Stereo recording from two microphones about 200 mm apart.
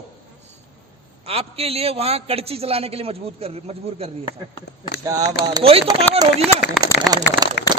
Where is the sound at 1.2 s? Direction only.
30° right (ahead or behind).